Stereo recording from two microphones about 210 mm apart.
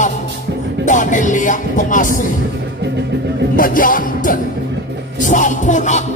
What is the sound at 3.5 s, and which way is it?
Music, 40° left (ahead or behind).